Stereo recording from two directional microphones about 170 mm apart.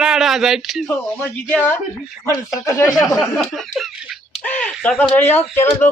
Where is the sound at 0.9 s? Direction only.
10° left (ahead or behind).